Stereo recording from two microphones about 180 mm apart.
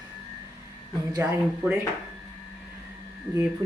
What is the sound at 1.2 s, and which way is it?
Speech, 10° right (ahead or behind).